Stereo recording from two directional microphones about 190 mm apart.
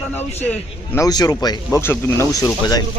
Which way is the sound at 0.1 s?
10° left (ahead or behind).